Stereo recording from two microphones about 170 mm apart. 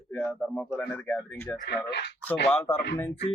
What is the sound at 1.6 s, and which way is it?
Speech, 85° left.